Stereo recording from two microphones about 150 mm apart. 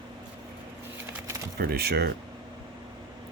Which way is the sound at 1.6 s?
90° right.